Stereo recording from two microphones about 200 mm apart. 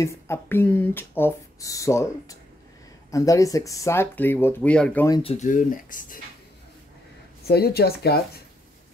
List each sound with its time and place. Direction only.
0.0 s speech: 10° left (ahead or behind)
5.1 s speech: 30° left (ahead or behind)
7.4 s speech: 50° left (ahead or behind)